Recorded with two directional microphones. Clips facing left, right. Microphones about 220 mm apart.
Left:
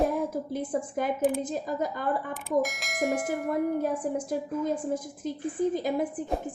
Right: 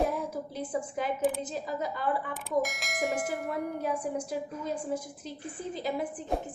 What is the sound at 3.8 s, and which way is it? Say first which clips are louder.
Speech: left 3 dB; 50° left (ahead or behind).